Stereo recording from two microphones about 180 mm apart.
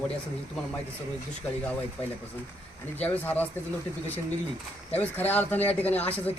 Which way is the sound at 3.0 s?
10° left (ahead or behind).